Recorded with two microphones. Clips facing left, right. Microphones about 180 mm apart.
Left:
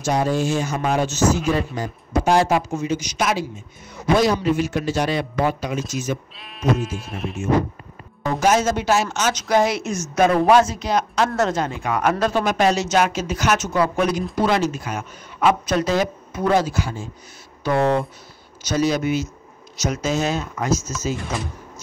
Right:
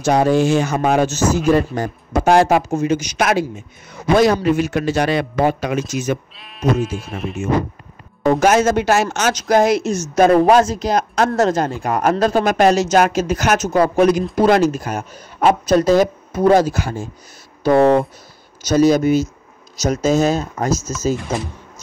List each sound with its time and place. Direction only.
0.0 s speech: 70° right (ahead or behind)
0.7 s a man's voice: 50° right (ahead or behind); by 6.1 s 70° right (ahead or behind)
6.3 s speech: centre (ahead or behind)
8.4 s a man's voice: 55° right (ahead or behind)
18.7 s a man's voice: 45° right (ahead or behind)